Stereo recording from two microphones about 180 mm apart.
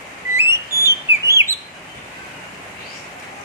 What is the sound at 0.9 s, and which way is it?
Chirp, 15° right (ahead or behind).